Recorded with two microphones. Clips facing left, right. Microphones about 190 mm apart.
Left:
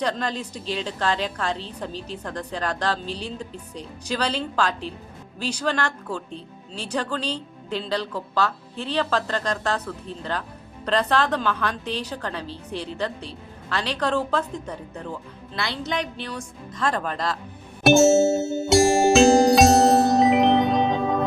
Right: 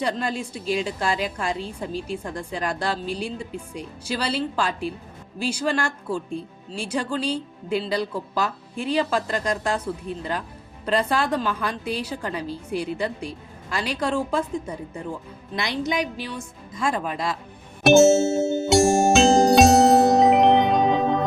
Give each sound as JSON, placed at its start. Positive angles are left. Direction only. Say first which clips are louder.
{"t": 0.0, "sound": "speech", "louder": "even", "side_deg": -10}
{"t": 17.8, "sound": "music", "louder": "right 1 dB", "side_deg": 0}